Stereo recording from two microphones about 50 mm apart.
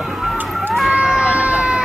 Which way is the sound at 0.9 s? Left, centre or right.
Centre.